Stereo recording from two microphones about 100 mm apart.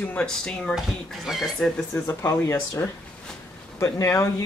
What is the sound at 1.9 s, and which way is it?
Speech, 30° left (ahead or behind).